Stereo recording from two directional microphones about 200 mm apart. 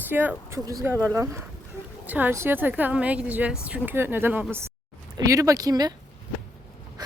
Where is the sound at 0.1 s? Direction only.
10° right (ahead or behind).